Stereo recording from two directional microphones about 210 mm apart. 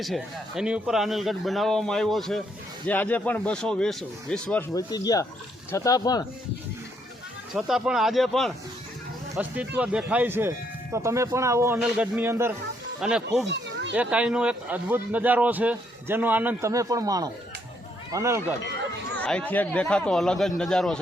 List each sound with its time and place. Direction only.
0.0 s speech: centre (ahead or behind)
4.7 s speech: 20° left (ahead or behind)
7.5 s a man's voice: centre (ahead or behind)
19.1 s speech: 5° left (ahead or behind)